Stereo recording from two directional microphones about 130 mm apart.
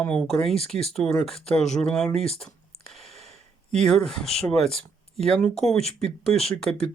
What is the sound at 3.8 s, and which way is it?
Speech, 5° left (ahead or behind).